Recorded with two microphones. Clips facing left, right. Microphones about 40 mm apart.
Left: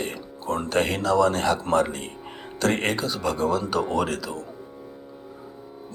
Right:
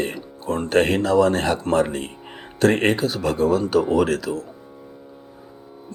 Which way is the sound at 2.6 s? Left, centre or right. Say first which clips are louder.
Right 6 dB; right.